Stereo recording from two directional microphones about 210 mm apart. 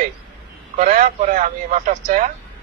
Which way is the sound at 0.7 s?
35° right (ahead or behind).